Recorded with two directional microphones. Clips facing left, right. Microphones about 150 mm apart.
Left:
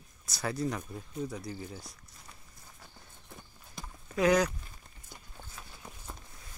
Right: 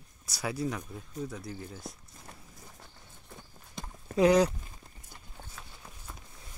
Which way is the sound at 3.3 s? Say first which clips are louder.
Right 3 dB; 25° right (ahead or behind).